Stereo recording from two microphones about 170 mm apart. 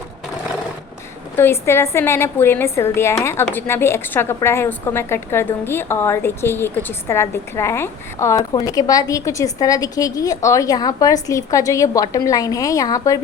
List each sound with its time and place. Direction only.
1.4 s a woman's voice: 15° left (ahead or behind)